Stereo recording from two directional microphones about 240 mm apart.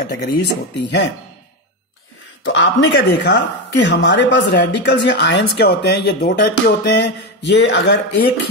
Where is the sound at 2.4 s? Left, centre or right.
Left.